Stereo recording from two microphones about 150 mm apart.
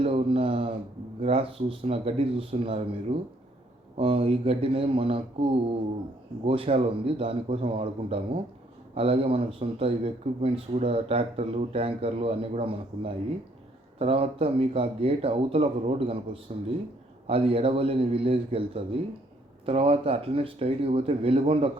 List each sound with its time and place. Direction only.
0.0 s speech: 40° right (ahead or behind)